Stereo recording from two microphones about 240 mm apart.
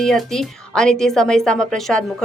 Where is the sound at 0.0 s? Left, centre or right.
Centre.